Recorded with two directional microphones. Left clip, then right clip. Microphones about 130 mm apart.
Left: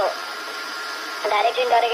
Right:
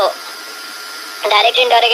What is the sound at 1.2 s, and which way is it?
Speech, 45° right (ahead or behind).